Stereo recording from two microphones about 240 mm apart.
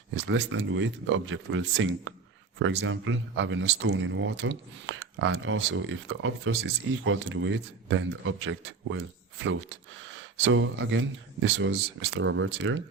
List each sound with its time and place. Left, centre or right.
0.1 s speech: right